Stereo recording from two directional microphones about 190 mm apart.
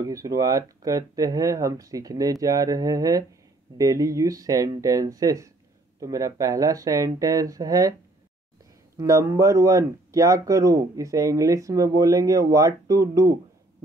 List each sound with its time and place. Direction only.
0.0 s speech: 20° right (ahead or behind)
8.9 s speech: 15° right (ahead or behind)